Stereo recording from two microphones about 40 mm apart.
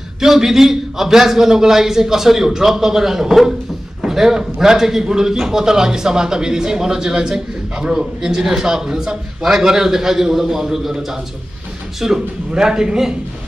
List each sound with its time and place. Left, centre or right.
0.2 s a man's voice: centre